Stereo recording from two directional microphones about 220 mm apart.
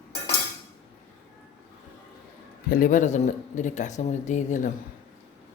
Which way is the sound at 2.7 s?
35° left (ahead or behind).